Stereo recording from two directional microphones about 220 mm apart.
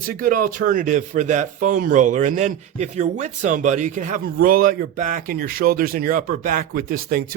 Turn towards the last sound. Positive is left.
turn(degrees=-40)  # may be behind; listen again after turning